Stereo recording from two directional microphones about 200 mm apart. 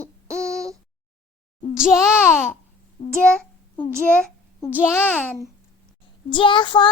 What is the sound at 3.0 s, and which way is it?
Speech, 35° left (ahead or behind).